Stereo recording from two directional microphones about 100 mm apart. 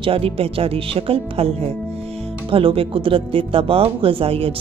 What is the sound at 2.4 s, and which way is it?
A woman's voice, 65° right (ahead or behind).